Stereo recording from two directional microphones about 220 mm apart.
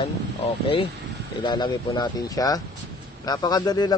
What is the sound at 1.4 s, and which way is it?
A man's voice, 20° left (ahead or behind).